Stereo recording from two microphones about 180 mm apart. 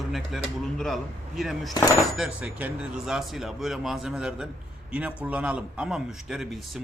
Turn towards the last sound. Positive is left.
turn(degrees=0)  # may be behind; listen again after turning